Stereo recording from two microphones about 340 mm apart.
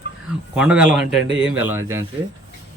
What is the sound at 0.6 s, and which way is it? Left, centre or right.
Speech, centre.